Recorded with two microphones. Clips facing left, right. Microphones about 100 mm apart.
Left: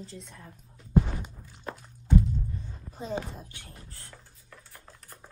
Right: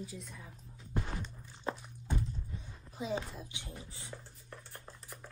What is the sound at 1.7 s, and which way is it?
Walk, 25° right (ahead or behind).